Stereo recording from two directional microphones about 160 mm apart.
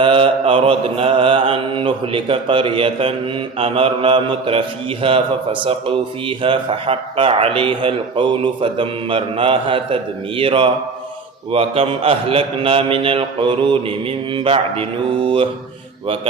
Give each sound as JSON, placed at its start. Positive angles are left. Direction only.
{"t": 0.0, "sound": "a man's voice", "side_deg": -35}